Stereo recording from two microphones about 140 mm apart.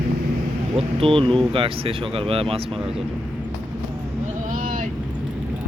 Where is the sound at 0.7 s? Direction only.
40° right (ahead or behind).